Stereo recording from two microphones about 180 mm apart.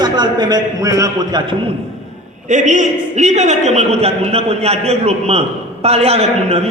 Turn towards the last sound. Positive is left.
turn(degrees=-35)  # may be behind; listen again after turning